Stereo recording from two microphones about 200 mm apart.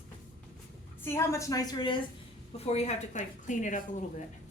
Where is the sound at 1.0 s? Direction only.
15° left (ahead or behind).